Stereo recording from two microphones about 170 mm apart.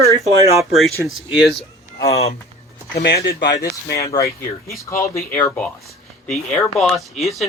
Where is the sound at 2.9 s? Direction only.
80° left.